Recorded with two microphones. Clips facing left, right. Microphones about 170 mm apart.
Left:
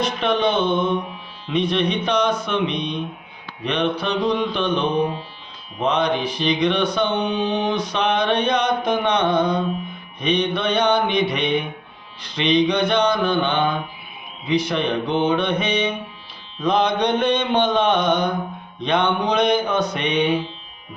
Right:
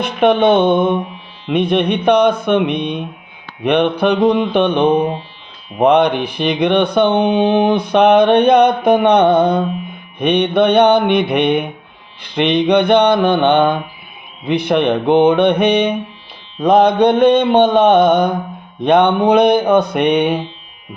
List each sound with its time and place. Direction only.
0.0 s mantra: 60° right (ahead or behind)